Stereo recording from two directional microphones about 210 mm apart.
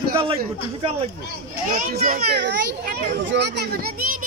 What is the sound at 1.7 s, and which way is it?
A child's voice, 40° right (ahead or behind).